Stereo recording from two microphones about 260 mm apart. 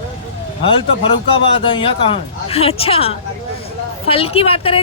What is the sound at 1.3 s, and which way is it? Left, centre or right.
Speech, centre.